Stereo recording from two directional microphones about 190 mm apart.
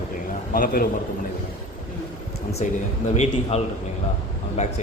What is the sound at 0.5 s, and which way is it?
Speech, 45° left (ahead or behind).